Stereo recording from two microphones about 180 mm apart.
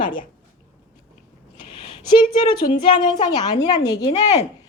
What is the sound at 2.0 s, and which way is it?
A woman's voice, 25° left (ahead or behind).